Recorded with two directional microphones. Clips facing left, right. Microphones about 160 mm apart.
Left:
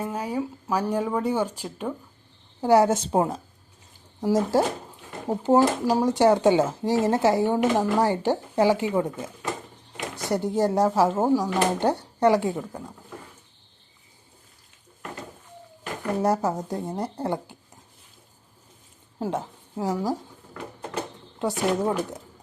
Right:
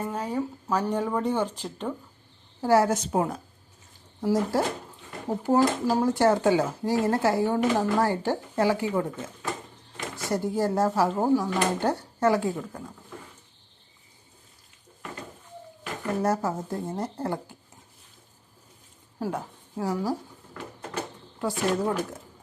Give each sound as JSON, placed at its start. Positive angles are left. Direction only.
{"t": 0.0, "sound": "speech", "side_deg": 10}
{"t": 16.2, "sound": "speech", "side_deg": 15}
{"t": 19.2, "sound": "a woman's voice", "side_deg": 20}